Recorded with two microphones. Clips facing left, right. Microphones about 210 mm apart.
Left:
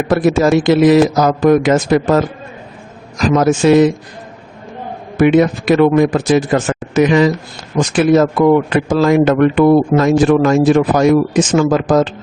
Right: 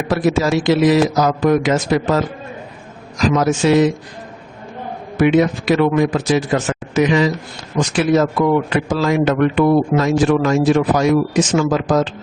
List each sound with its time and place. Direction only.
0.1 s a man's voice: 50° left (ahead or behind)
3.2 s a man's voice: 50° left (ahead or behind)
5.1 s a man's voice: 50° left (ahead or behind)